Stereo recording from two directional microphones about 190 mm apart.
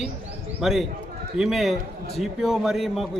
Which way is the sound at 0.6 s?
Centre (ahead or behind).